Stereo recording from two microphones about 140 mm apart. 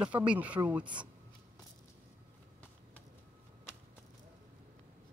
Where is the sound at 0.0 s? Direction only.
10° right (ahead or behind).